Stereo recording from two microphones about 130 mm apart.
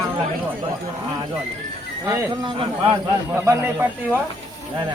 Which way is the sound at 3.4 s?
15° right (ahead or behind).